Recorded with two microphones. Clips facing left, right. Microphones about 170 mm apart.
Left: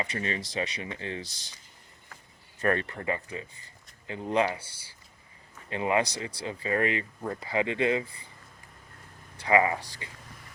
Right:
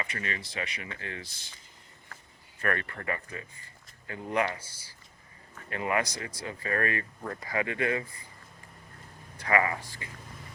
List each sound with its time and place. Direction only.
0.0 s speech: 30° left (ahead or behind)
2.6 s speech: 25° left (ahead or behind)
5.6 s speech: 20° left (ahead or behind)
9.5 s speech: 20° left (ahead or behind)